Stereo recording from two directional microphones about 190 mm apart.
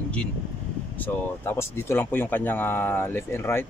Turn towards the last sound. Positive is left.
turn(degrees=10)  # may be behind; listen again after turning